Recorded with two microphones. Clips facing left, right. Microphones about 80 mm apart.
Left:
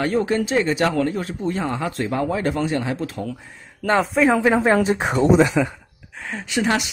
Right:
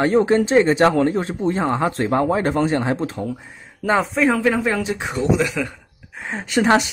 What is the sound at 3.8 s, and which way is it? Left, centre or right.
Speech, centre.